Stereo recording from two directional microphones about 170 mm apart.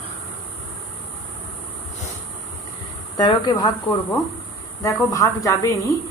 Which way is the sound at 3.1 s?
20° left (ahead or behind).